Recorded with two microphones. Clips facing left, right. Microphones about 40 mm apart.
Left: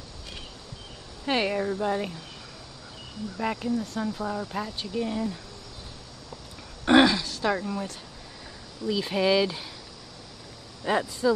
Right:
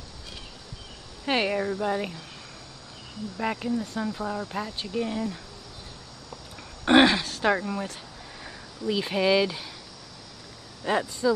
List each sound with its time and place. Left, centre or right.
1.2 s speech: centre
3.3 s speech: centre
6.8 s a sound: right
7.1 s a sound: right
7.4 s speech: right
9.1 s speech: centre
10.8 s speech: centre